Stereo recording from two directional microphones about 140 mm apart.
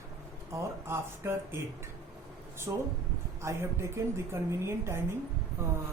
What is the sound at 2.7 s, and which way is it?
Speech, 20° right (ahead or behind).